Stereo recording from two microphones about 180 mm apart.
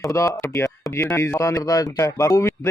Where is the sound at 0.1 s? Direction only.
15° left (ahead or behind).